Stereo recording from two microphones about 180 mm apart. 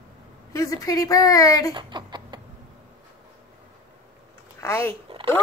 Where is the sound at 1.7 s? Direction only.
25° right (ahead or behind).